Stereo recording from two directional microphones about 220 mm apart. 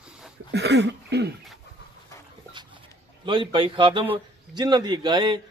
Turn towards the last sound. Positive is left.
turn(degrees=-20)  # may be behind; listen again after turning